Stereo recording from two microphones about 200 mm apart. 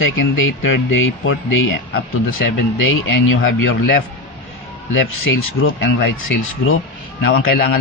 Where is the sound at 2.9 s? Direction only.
90° left.